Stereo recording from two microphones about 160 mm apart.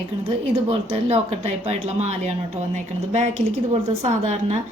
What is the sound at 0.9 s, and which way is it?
Speech, 40° right (ahead or behind).